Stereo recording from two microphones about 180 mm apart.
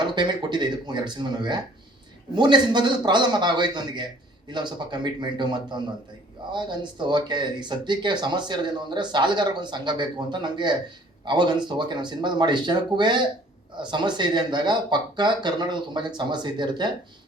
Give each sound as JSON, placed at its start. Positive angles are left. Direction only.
{"t": 0.0, "sound": "speech", "side_deg": -25}